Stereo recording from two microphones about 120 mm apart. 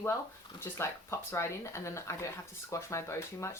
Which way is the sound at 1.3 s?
25° left (ahead or behind).